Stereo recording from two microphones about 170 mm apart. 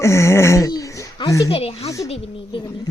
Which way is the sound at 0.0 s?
15° left (ahead or behind).